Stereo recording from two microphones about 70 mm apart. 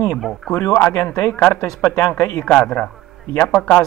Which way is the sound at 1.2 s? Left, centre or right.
Left.